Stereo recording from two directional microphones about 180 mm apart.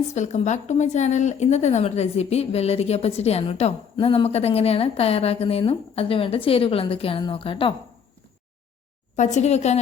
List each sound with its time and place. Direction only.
0.1 s speech: 40° left (ahead or behind)
9.1 s speech: 40° left (ahead or behind)